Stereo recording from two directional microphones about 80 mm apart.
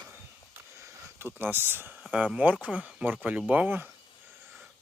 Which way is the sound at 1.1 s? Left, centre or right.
Right.